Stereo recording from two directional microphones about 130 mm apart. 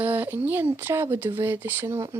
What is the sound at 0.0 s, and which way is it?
Speech, 15° right (ahead or behind).